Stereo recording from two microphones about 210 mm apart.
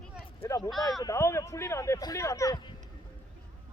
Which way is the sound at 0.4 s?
15° left (ahead or behind).